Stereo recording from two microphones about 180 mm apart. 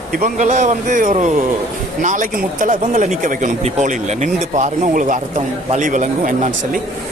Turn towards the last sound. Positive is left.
turn(degrees=-45)  # may be behind; listen again after turning